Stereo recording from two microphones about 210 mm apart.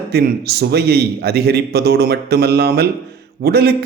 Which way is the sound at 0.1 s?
50° right (ahead or behind).